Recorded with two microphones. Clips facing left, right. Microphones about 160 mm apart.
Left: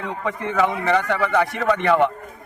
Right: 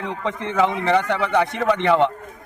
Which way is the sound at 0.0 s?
20° right (ahead or behind).